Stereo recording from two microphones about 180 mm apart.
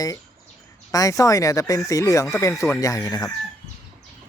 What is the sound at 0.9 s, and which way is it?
Speech, 20° left (ahead or behind).